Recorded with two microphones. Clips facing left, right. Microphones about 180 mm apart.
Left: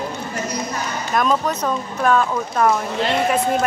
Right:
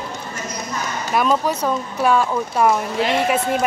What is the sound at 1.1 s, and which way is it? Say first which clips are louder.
Speech: right 1 dB; 10° right (ahead or behind).